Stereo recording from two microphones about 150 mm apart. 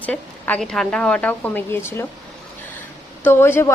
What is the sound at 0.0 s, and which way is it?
A woman's voice, 10° left (ahead or behind).